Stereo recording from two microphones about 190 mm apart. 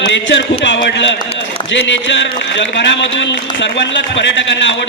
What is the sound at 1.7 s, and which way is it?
Speech, 70° left (ahead or behind).